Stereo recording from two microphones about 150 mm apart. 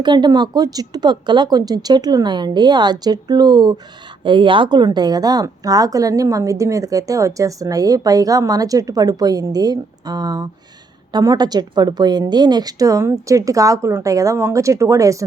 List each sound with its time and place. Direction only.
0.0 s a woman's voice: 30° right (ahead or behind)